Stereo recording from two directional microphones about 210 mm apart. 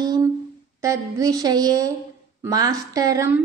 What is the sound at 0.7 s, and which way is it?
A woman's voice, 15° right (ahead or behind).